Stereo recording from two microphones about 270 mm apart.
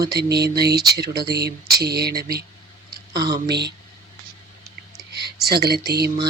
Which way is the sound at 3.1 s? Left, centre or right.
Centre.